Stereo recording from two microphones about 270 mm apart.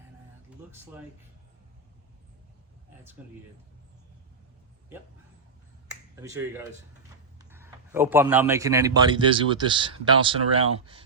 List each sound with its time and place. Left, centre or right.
5.9 s speech: centre